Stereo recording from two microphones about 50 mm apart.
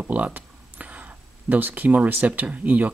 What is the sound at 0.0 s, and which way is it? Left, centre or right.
Speech, right.